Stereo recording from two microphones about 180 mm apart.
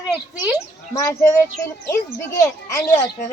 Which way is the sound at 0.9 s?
20° left (ahead or behind).